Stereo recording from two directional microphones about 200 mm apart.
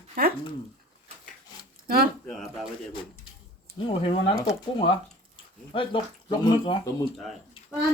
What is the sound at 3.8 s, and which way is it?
Speech, 25° left (ahead or behind).